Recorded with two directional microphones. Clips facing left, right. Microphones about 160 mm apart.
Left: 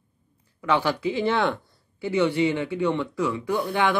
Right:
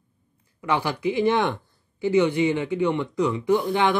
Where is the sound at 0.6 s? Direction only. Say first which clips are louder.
Left 2 dB; 15° right (ahead or behind).